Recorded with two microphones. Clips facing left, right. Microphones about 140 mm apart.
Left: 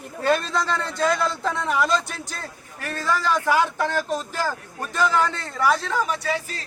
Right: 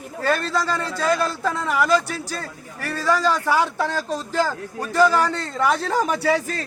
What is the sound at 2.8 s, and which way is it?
Speech, 15° left (ahead or behind).